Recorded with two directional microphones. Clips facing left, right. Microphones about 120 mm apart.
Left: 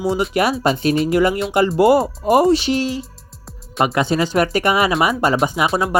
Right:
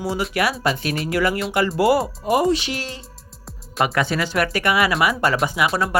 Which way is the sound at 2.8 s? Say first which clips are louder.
Left 11 dB; 15° left (ahead or behind).